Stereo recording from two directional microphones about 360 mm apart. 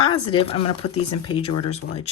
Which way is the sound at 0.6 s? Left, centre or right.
Left.